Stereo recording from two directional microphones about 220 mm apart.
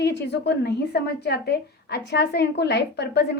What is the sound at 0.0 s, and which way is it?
A woman's voice, 50° left (ahead or behind).